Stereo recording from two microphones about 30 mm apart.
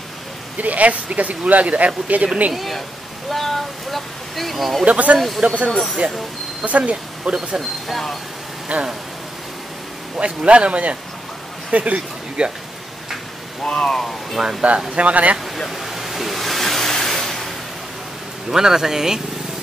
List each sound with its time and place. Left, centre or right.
0.6 s speech: right
2.5 s speech: centre
4.8 s speech: right
5.7 s speech: centre
6.6 s a man's voice: right
7.9 s speech: centre
8.7 s speech: right
10.1 s a man's voice: right
12.4 s a man's voice: right
13.7 s speech: centre
14.4 s speech: centre
15.0 s speech: right
15.7 s vehicle: centre
18.5 s speech: centre